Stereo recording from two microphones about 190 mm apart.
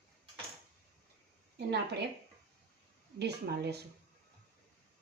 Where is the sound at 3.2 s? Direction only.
60° right (ahead or behind).